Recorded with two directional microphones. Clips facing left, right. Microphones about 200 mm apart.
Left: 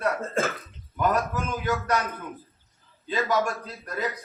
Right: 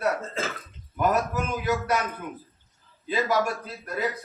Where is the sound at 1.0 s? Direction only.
5° right (ahead or behind).